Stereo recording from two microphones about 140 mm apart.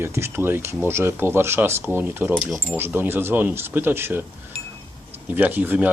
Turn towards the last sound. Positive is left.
turn(degrees=-10)  # may be behind; listen again after turning